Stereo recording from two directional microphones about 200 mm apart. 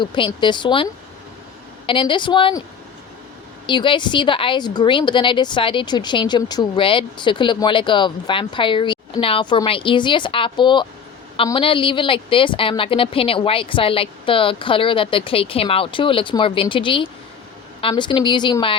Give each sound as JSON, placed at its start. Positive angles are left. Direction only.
{"t": 0.0, "sound": "a woman's voice", "side_deg": 25}
{"t": 1.9, "sound": "a woman's voice", "side_deg": 25}
{"t": 3.7, "sound": "a woman's voice", "side_deg": 25}